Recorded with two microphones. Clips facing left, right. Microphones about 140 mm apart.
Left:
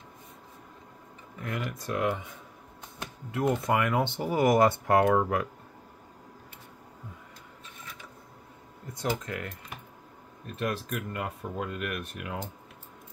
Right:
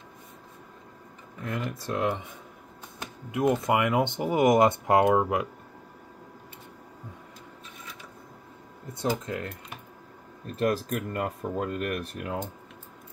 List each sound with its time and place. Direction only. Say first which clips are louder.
1.4 s speech: right 2 dB; 30° right (ahead or behind)
3.3 s speech: right 3 dB; 15° right (ahead or behind)
9.2 s speech: right 3 dB; 25° right (ahead or behind)
10.4 s speech: right 6 dB; 35° right (ahead or behind)